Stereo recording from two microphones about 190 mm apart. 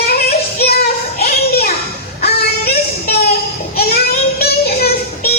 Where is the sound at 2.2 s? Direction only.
55° left (ahead or behind).